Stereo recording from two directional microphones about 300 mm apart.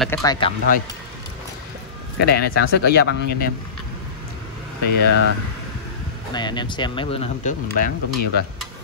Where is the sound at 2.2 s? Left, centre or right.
Left.